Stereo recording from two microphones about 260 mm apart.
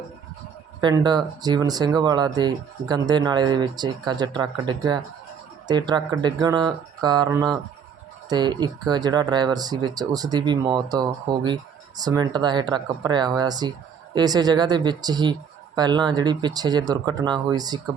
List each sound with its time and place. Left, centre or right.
0.8 s speech: centre